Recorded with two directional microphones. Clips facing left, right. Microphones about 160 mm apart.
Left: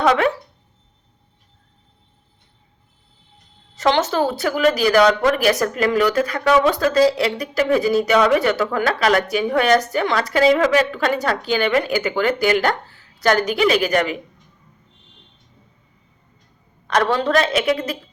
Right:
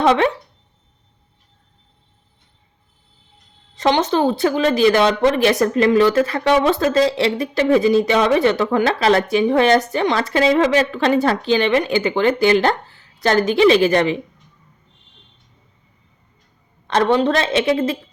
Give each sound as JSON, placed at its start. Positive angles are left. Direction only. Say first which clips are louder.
{"t": 0.0, "sound": "speech", "louder": "right 2 dB", "side_deg": -25}
{"t": 3.8, "sound": "speech", "louder": "right 1 dB", "side_deg": -20}
{"t": 16.8, "sound": "speech", "louder": "right 3 dB", "side_deg": -25}